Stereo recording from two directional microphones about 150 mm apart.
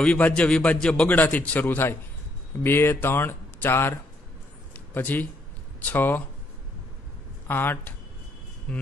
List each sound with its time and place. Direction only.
0.0 s a man's voice: 10° left (ahead or behind)
7.4 s a man's voice: 15° left (ahead or behind)